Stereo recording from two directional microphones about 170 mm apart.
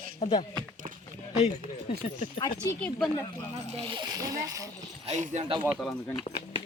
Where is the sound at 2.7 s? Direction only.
5° left (ahead or behind).